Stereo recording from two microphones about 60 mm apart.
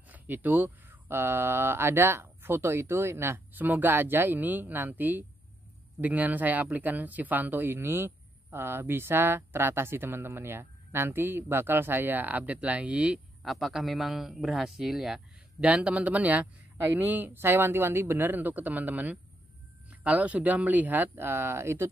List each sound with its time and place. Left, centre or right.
0.1 s speech: right
3.5 s speech: right
13.4 s speech: centre
15.6 s a man's voice: right